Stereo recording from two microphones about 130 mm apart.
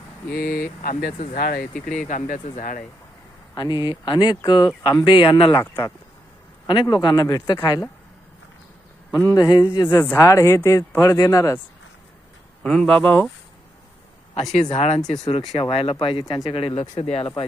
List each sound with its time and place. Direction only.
0.8 s speech: 85° left
2.0 s speech: 75° left (ahead or behind)
3.5 s speech: 30° left (ahead or behind)
6.9 s speech: 30° left (ahead or behind)
9.1 s speech: 25° left (ahead or behind)
9.9 s speech: 20° left (ahead or behind)
12.6 s speech: 5° left (ahead or behind)
14.5 s speech: 55° left (ahead or behind)
15.2 s speech: 45° left (ahead or behind)